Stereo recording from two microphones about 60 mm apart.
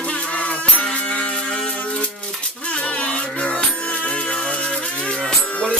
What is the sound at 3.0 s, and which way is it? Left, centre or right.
Music, left.